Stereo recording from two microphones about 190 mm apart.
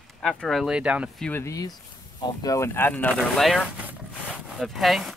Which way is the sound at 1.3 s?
15° left (ahead or behind).